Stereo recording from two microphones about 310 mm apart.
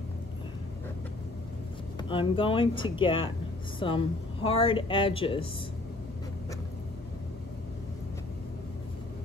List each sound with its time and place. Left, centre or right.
2.0 s speech: centre